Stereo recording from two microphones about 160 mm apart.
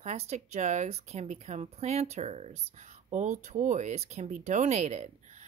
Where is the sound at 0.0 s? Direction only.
45° right (ahead or behind).